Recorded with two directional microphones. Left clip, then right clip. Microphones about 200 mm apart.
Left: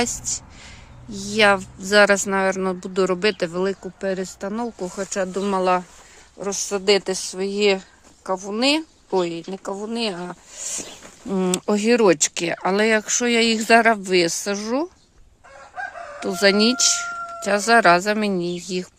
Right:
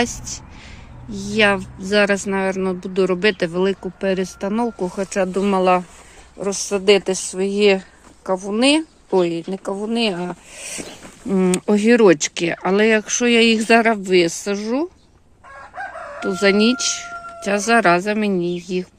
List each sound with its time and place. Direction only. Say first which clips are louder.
0.0 s speech: right 2 dB; 10° left (ahead or behind)
3.2 s speech: right 3 dB; 5° left (ahead or behind)
16.2 s speech: right 1 dB; 15° left (ahead or behind)